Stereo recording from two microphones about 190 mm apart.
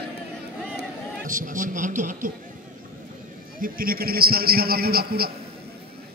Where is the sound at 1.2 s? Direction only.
45° right (ahead or behind).